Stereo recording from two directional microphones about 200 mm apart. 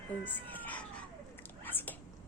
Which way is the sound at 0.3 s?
10° left (ahead or behind).